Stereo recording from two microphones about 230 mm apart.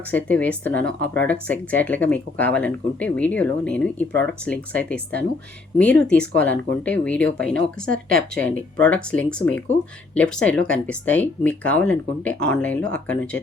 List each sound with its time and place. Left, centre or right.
0.1 s speech: centre
7.9 s a woman's voice: right
8.8 s speech: centre
9.7 s speech: left
10.2 s speech: centre